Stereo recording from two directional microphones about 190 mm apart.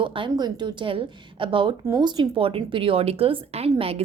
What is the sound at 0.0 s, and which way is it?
A woman's voice, 25° right (ahead or behind).